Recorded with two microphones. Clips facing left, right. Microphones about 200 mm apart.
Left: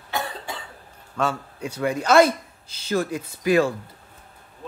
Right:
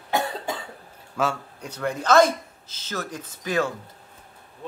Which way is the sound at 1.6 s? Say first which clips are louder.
Left 5 dB; 10° left (ahead or behind).